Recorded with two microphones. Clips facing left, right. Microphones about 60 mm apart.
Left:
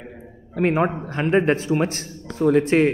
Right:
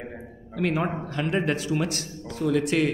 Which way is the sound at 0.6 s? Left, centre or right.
Left.